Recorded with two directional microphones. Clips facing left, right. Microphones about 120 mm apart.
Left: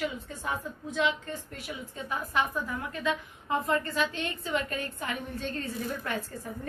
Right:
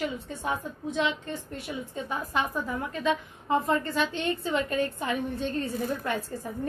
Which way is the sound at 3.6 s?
25° right (ahead or behind).